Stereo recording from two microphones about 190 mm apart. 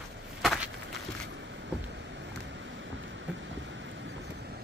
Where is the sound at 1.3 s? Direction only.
70° right (ahead or behind).